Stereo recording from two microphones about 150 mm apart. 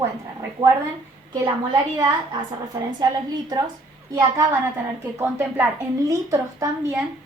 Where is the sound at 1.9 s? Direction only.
25° right (ahead or behind).